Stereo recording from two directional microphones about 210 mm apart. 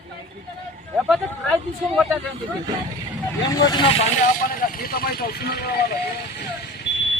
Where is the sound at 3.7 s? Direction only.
25° left (ahead or behind).